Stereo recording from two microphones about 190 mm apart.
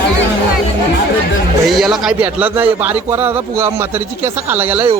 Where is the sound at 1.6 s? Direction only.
Centre (ahead or behind).